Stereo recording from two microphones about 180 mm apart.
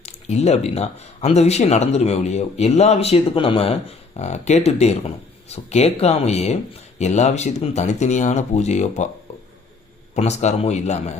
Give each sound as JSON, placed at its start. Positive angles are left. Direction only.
{"t": 0.0, "sound": "speech", "side_deg": 35}
{"t": 10.2, "sound": "speech", "side_deg": 40}